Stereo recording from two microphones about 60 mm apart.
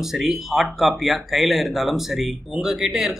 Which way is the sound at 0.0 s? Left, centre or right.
Centre.